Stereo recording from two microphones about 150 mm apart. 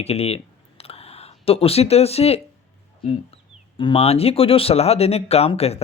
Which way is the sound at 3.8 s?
40° left (ahead or behind).